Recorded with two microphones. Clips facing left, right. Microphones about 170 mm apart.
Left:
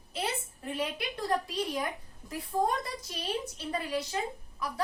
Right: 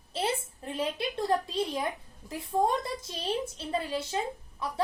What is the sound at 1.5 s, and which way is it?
A woman's voice, 25° right (ahead or behind).